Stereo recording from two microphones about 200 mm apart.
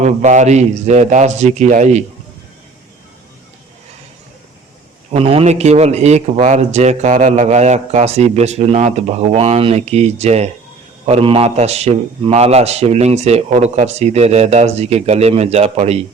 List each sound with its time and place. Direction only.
0.0 s speech: 35° right (ahead or behind)
5.1 s speech: 30° right (ahead or behind)